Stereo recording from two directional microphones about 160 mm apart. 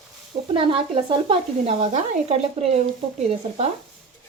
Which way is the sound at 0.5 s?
35° right (ahead or behind).